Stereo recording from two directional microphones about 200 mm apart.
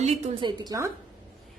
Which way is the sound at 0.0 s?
20° right (ahead or behind).